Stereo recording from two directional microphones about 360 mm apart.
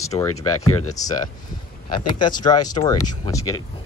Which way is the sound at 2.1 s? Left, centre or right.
Centre.